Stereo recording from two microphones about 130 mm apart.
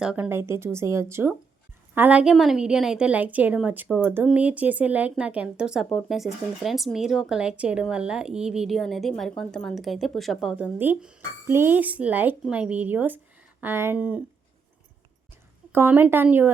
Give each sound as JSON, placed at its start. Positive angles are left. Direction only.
{"t": 0.0, "sound": "a woman's voice", "side_deg": -5}
{"t": 0.3, "sound": "a woman's voice", "side_deg": -20}
{"t": 15.7, "sound": "a woman's voice", "side_deg": -15}